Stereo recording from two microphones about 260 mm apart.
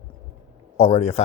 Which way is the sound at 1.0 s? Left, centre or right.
Left.